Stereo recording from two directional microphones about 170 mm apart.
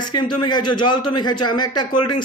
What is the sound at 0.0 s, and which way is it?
A man's voice, 25° left (ahead or behind).